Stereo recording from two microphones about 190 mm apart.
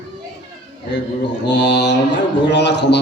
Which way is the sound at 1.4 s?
65° left (ahead or behind).